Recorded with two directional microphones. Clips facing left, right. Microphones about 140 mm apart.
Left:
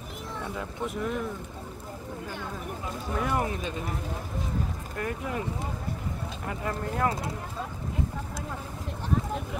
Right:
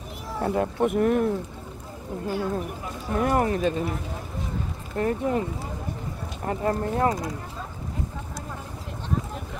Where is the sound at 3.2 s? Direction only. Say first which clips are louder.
Right 7 dB; 50° right (ahead or behind).